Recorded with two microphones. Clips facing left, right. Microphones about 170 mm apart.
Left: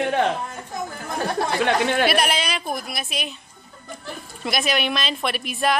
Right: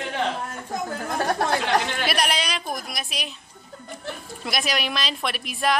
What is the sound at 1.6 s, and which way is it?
Speech, 60° left (ahead or behind).